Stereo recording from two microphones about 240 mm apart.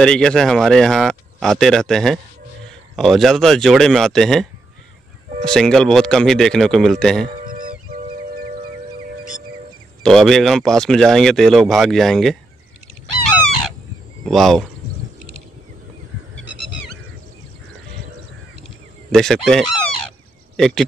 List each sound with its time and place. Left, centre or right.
0.0 s speech: centre
7.4 s honk: right
10.0 s speech: centre
14.2 s speech: centre
19.1 s speech: centre